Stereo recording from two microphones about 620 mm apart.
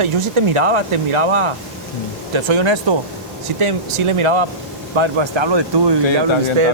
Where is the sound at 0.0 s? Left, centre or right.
Right.